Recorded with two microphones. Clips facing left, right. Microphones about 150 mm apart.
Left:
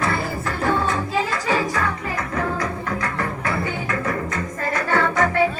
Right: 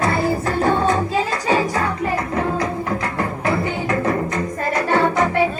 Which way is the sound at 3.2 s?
30° right (ahead or behind).